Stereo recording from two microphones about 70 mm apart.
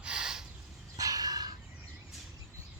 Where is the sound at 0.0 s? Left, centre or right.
Centre.